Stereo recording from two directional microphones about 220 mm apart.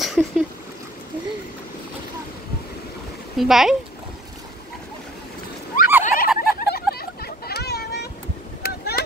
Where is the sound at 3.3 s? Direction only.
Centre (ahead or behind).